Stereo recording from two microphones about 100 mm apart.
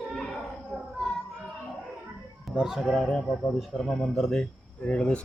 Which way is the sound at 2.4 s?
5° right (ahead or behind).